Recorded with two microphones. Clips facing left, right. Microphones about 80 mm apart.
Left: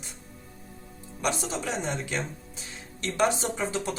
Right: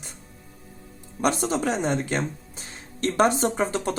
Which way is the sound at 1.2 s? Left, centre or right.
Right.